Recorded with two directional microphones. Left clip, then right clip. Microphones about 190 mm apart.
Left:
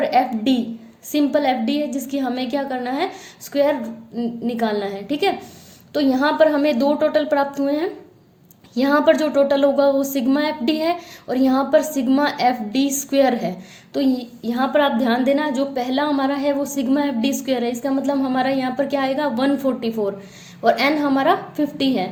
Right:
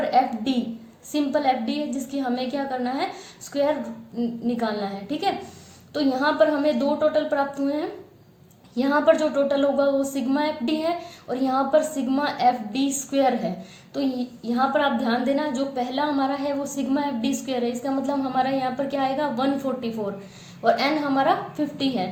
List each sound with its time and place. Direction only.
0.1 s a woman's voice: 50° left (ahead or behind)